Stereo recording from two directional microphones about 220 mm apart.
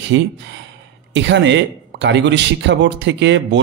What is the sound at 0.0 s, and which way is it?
Speech, 55° right (ahead or behind).